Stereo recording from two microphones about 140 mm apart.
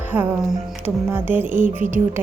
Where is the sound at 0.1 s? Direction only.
10° right (ahead or behind).